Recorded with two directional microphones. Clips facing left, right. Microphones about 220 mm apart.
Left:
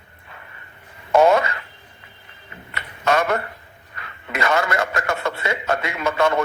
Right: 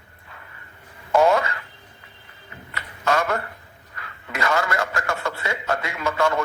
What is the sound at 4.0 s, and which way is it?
A man's voice, 20° left (ahead or behind).